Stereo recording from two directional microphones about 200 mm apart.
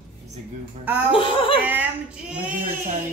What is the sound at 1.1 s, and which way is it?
Speech, 25° left (ahead or behind).